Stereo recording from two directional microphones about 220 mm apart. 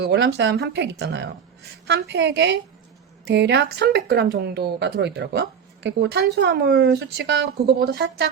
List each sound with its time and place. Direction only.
0.0 s speech: 50° right (ahead or behind)